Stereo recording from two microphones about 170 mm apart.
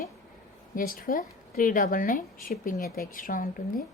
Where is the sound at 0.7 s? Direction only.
55° left (ahead or behind).